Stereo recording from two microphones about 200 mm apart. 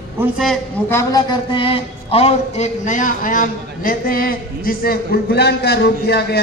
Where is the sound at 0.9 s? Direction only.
15° left (ahead or behind); by 6.2 s 55° left (ahead or behind).